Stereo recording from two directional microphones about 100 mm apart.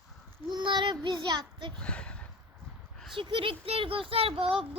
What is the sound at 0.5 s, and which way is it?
Child singing, 50° right (ahead or behind).